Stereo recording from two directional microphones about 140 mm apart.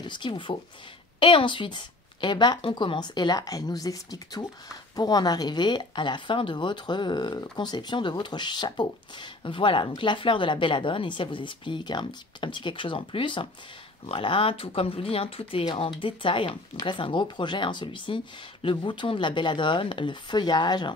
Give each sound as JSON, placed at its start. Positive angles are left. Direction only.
{"t": 0.0, "sound": "speech", "side_deg": 35}